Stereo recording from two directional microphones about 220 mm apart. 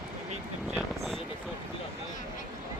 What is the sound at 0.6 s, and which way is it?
Vehicle, centre (ahead or behind).